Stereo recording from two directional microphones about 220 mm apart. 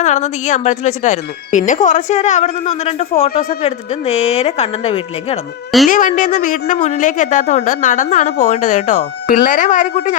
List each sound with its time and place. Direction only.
0.0 s a woman's voice: 30° left (ahead or behind)